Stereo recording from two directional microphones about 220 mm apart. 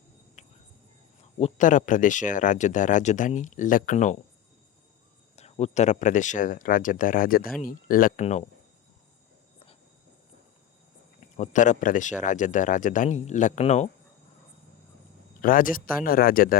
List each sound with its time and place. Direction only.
0.4 s cricket: 30° left (ahead or behind)
1.4 s speech: 30° left (ahead or behind)
5.4 s speech: 30° left (ahead or behind)
11.3 s speech: 35° left (ahead or behind)
15.4 s speech: 40° left (ahead or behind)